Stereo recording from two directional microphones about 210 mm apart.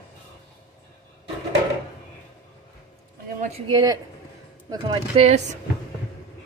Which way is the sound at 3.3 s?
30° right (ahead or behind).